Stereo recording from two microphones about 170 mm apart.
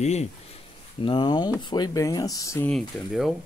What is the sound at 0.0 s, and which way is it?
Speech, 40° left (ahead or behind).